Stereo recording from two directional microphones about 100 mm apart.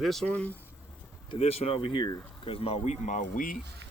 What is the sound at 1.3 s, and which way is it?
Speech, 80° left.